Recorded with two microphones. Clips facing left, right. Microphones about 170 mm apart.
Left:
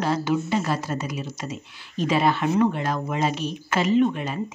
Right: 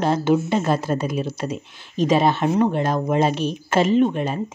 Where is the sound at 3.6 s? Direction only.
50° right (ahead or behind).